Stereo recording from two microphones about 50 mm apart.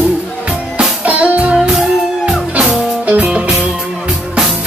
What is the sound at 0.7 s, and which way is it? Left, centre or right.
Music, right.